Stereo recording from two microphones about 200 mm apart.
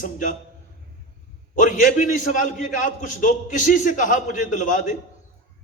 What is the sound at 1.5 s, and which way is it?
A man's voice, 40° left (ahead or behind).